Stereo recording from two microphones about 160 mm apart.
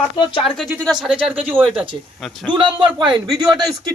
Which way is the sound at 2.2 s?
Centre (ahead or behind).